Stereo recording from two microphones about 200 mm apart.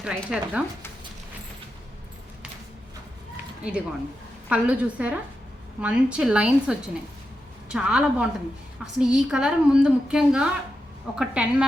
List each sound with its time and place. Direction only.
0.0 s a woman's voice: 5° right (ahead or behind)
3.6 s a woman's voice: 5° right (ahead or behind)